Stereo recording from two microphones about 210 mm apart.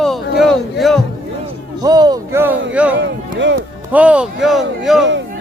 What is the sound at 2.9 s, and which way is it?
Speech, 60° right (ahead or behind).